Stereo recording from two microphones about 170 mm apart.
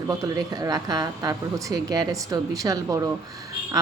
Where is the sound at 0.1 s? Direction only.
20° right (ahead or behind).